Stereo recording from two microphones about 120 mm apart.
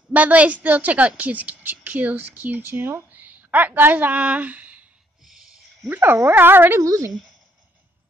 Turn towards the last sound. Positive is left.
turn(degrees=-25)  # may be behind; listen again after turning